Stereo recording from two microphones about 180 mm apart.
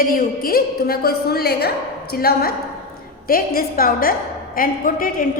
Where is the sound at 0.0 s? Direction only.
55° left (ahead or behind).